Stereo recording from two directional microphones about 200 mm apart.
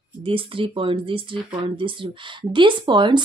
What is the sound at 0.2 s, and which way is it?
Speech, 25° right (ahead or behind).